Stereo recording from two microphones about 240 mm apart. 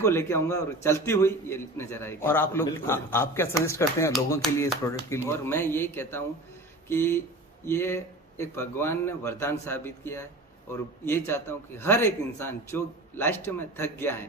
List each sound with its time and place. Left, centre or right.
0.0 s a man's voice: centre
4.4 s a man's voice: centre